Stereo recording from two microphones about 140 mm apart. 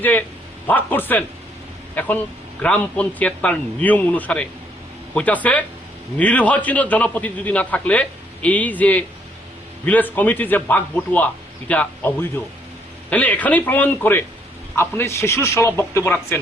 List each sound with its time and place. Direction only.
0.0 s a man's voice: 15° left (ahead or behind)